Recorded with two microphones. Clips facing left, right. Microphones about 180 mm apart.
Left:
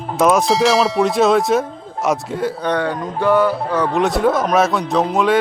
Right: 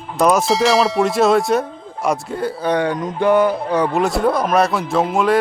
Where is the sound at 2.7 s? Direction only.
15° right (ahead or behind).